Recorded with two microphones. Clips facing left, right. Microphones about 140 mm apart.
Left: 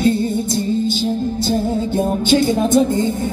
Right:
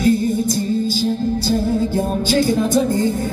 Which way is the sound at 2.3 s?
20° left (ahead or behind).